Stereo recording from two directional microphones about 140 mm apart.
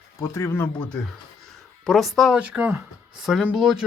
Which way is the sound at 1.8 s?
Centre (ahead or behind).